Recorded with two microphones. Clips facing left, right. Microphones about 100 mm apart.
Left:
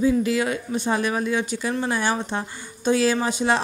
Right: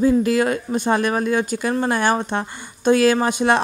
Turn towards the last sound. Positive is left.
turn(degrees=-55)  # may be behind; listen again after turning